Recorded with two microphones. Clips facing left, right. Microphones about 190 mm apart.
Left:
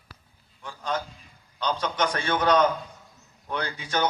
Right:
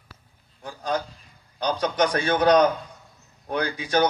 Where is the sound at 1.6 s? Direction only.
10° right (ahead or behind).